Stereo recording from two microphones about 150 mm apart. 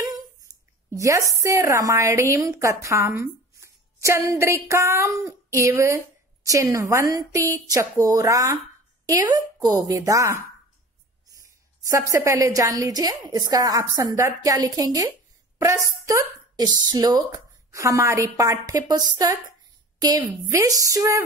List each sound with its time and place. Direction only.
0.9 s a woman's voice: 20° right (ahead or behind)